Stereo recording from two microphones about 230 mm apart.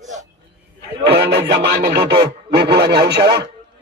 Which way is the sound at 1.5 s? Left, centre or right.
Right.